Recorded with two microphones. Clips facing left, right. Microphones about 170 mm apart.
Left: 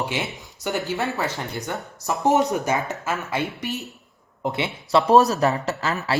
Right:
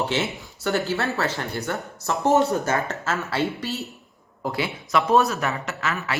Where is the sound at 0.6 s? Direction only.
15° left (ahead or behind).